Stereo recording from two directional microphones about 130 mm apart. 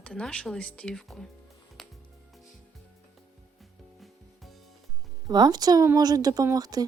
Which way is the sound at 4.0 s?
Centre (ahead or behind).